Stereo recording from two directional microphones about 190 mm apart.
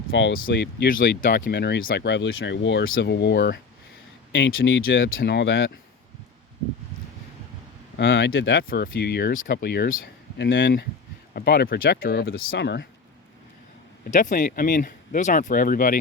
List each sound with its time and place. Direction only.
0.1 s speech: 70° left (ahead or behind)
0.9 s speech: 50° left (ahead or behind)
4.3 s speech: 70° left (ahead or behind)
7.9 s speech: 70° left (ahead or behind)
8.7 s speech: 55° left (ahead or behind)
11.3 s speech: 55° left (ahead or behind)
14.1 s speech: 45° left (ahead or behind)